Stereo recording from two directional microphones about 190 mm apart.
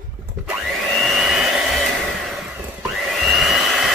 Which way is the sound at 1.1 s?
Centre (ahead or behind).